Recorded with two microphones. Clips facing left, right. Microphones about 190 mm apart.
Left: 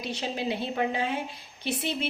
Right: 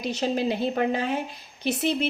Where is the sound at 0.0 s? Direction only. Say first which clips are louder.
Right 6 dB; 45° right (ahead or behind).